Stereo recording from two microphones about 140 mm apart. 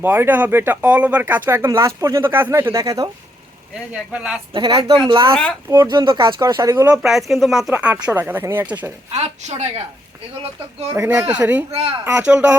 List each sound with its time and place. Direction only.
0.0 s speech: 15° right (ahead or behind)
3.9 s speech: 5° right (ahead or behind)
4.5 s speech: 35° right (ahead or behind)
5.6 s speech: 20° right (ahead or behind)
6.4 s speech: 25° right (ahead or behind)
6.8 s speech: 5° right (ahead or behind)
9.1 s a woman's voice: 50° right (ahead or behind)
10.9 s speech: 20° right (ahead or behind)
11.2 s speech: 10° right (ahead or behind)
11.7 s a woman's voice: 45° right (ahead or behind)
12.2 s speech: 10° right (ahead or behind)